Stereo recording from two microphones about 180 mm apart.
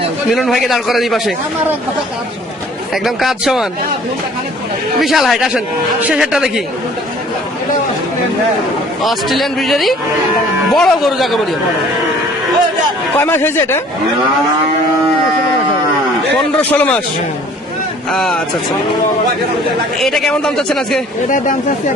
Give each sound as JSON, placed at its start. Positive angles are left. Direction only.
{"t": 0.3, "sound": "a man's voice", "side_deg": 0}
{"t": 2.9, "sound": "a man's voice", "side_deg": 0}
{"t": 4.9, "sound": "a man's voice", "side_deg": 0}
{"t": 9.0, "sound": "a man's voice", "side_deg": 0}
{"t": 13.1, "sound": "speech", "side_deg": 10}
{"t": 16.7, "sound": "speech", "side_deg": 5}
{"t": 18.1, "sound": "a man's voice", "side_deg": 0}
{"t": 20.0, "sound": "a man's voice", "side_deg": 0}
{"t": 21.2, "sound": "speech", "side_deg": 45}